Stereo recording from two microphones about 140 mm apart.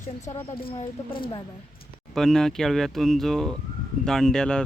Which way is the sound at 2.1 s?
5° left (ahead or behind).